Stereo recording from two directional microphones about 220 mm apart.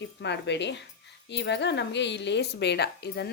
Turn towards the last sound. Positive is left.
turn(degrees=50)  # may be behind; listen again after turning